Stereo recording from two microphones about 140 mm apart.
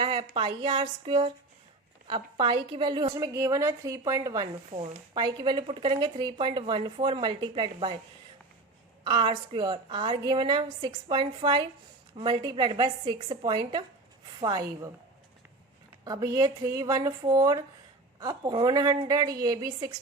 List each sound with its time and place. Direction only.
0.0 s a sound: 35° right (ahead or behind)
0.3 s a woman's voice: 35° right (ahead or behind)
3.3 s a woman's voice: 20° right (ahead or behind)
4.7 s a woman's voice: 35° right (ahead or behind)
9.0 s a woman's voice: 30° right (ahead or behind)
13.1 s a woman's voice: 45° right (ahead or behind); by 14.8 s 25° right (ahead or behind)
16.0 s a woman's voice: 25° right (ahead or behind)